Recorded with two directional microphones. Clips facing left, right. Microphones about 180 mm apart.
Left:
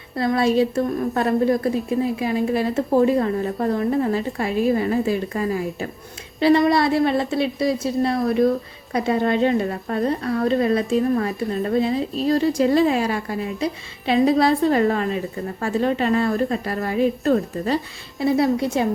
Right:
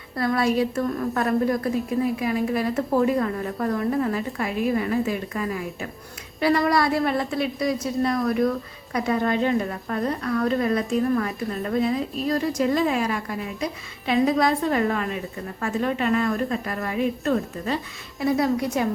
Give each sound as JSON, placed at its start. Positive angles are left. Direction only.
{"t": 0.2, "sound": "a woman's voice", "side_deg": 25}